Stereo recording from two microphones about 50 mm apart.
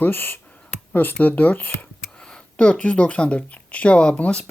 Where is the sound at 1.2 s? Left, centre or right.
Left.